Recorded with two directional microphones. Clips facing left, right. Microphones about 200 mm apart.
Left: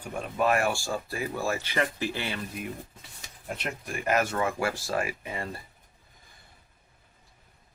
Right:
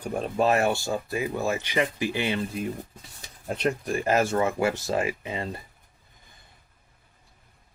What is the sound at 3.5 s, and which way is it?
Speech, 35° right (ahead or behind).